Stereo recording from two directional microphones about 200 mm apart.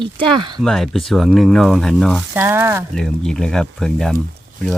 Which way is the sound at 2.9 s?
Centre (ahead or behind).